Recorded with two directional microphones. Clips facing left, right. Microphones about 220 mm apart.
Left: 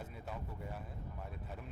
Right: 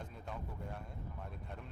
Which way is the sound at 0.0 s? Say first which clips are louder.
Even; 5° left (ahead or behind).